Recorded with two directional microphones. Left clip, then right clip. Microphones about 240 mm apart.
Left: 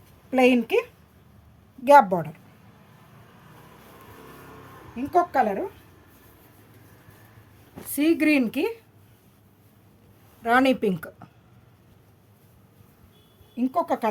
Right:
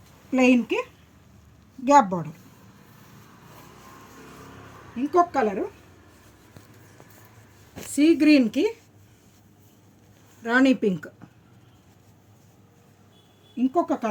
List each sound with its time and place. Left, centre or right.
0.3 s speech: left
5.1 s speech: left
7.9 s speech: left
10.4 s speech: left
13.7 s speech: left